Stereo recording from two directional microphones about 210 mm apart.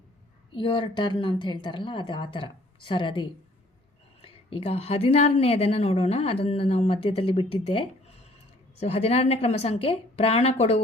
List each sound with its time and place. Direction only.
0.5 s a woman's voice: 25° left (ahead or behind)